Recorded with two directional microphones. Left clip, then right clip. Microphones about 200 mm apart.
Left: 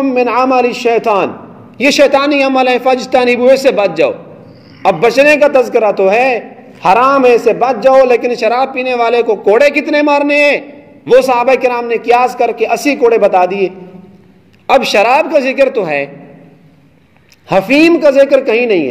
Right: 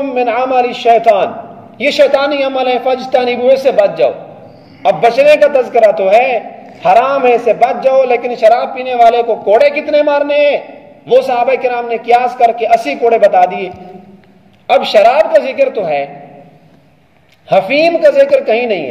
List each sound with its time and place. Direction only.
0.0 s a man's voice: 35° left (ahead or behind)
14.7 s a man's voice: 40° left (ahead or behind)
17.5 s a man's voice: 40° left (ahead or behind)